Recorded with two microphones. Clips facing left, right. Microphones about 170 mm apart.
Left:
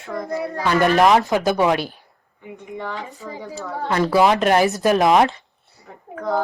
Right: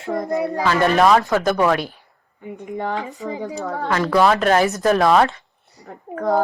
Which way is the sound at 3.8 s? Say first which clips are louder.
Even; 20° left (ahead or behind).